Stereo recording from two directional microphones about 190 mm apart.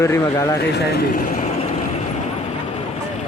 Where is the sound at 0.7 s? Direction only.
60° left (ahead or behind).